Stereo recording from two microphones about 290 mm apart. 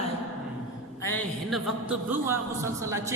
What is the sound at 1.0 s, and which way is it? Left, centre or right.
A woman's voice, centre.